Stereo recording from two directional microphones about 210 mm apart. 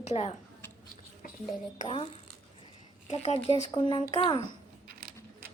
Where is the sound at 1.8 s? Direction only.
30° left (ahead or behind).